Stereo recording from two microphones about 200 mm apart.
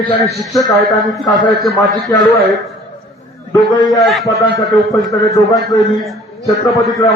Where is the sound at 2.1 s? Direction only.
20° left (ahead or behind).